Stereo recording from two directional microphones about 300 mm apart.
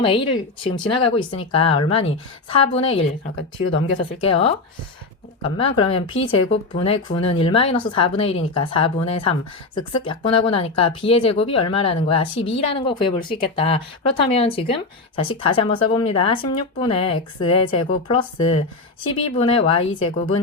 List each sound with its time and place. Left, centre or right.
0.0 s speech: centre
4.2 s a woman's voice: centre